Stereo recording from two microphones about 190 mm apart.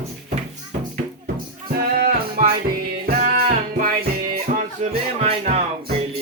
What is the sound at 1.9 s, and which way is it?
Music, 50° right (ahead or behind).